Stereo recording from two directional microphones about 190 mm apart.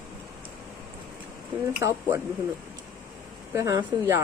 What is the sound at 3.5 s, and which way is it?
Speech, 15° right (ahead or behind).